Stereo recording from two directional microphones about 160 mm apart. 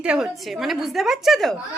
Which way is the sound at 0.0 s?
5° right (ahead or behind).